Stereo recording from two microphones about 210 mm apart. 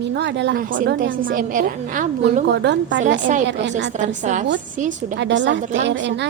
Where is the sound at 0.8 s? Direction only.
40° right (ahead or behind).